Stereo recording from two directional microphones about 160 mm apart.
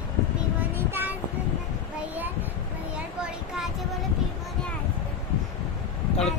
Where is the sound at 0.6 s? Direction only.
15° right (ahead or behind).